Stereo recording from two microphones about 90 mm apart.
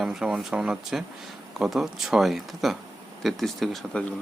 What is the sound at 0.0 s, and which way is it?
Speech, 5° right (ahead or behind).